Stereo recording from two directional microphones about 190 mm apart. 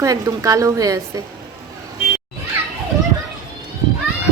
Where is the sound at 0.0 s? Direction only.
20° right (ahead or behind).